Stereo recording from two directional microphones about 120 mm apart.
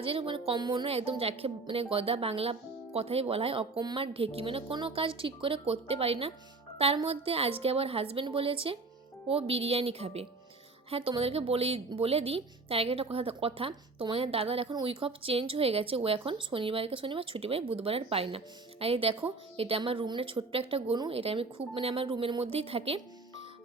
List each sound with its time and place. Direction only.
0.0 s speech: 50° right (ahead or behind)
0.9 s speech: 55° right (ahead or behind)